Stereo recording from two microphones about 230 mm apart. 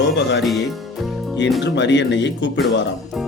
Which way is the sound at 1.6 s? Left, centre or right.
Left.